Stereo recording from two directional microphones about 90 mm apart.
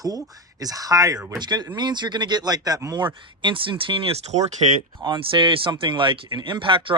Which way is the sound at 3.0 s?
65° right (ahead or behind).